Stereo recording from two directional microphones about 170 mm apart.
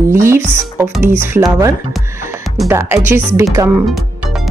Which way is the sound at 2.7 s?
15° right (ahead or behind).